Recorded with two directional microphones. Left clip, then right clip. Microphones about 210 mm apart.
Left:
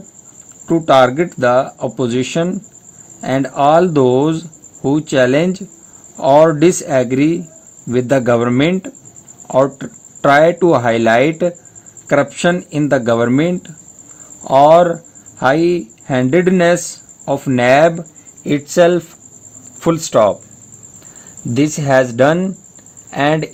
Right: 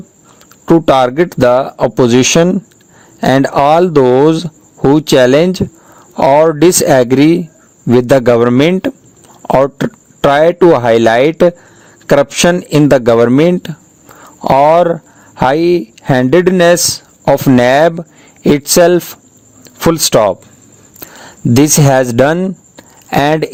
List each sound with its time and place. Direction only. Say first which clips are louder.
0.6 s speech: right 2 dB; 50° right (ahead or behind)